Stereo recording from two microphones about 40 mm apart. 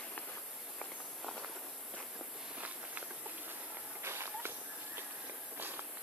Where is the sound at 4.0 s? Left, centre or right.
Right.